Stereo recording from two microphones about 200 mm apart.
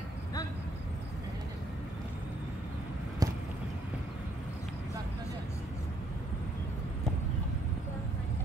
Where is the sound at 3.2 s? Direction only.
20° right (ahead or behind).